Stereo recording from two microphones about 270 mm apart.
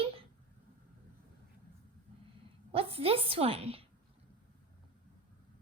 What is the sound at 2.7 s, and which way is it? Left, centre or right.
Speech, right.